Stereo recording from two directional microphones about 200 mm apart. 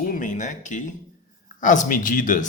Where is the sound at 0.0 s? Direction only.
40° left (ahead or behind).